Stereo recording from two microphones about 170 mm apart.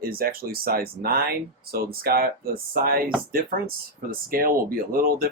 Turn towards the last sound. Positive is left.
turn(degrees=-55)  # may be behind; listen again after turning